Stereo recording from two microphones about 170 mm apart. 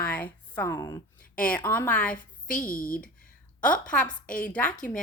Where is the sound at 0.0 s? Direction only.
10° left (ahead or behind).